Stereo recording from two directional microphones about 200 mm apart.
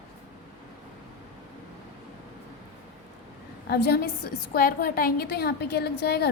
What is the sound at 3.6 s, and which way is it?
A woman's voice, 55° left (ahead or behind).